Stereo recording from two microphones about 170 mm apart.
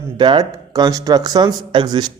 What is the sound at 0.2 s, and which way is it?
A man's voice, 25° right (ahead or behind).